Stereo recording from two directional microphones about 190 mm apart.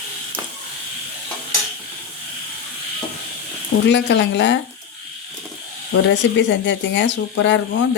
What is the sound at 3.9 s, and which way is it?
Speech, 70° left (ahead or behind).